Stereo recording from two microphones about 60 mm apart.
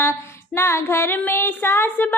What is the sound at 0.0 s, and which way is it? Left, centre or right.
Female singing, left.